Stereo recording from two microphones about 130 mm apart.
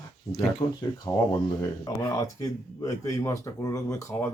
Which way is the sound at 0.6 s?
40° left (ahead or behind).